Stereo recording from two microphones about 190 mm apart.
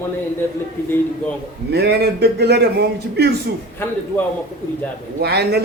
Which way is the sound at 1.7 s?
60° right (ahead or behind).